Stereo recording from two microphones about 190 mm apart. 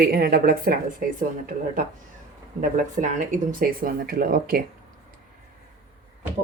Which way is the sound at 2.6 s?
45° right (ahead or behind).